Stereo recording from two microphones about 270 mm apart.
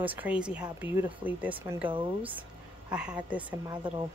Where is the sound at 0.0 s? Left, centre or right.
Centre.